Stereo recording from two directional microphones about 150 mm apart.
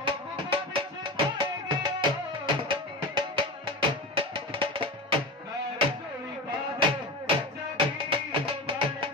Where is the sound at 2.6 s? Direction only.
35° right (ahead or behind).